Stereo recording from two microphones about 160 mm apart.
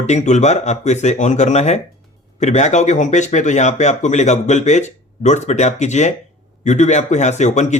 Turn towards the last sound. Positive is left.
turn(degrees=45)  # may be behind; listen again after turning